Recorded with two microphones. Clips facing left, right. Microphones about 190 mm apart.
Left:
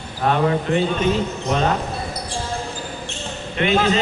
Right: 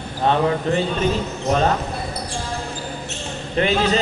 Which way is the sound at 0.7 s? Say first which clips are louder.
Even; 35° right (ahead or behind).